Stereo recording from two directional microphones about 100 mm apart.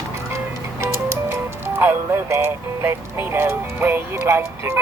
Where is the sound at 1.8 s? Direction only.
25° right (ahead or behind).